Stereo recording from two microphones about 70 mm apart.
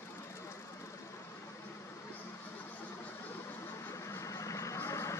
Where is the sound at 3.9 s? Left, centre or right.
Left.